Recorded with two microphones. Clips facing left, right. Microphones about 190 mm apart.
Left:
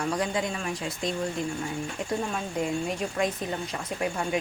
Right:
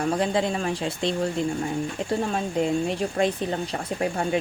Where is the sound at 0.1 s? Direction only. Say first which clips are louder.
Right 5 dB; 30° right (ahead or behind).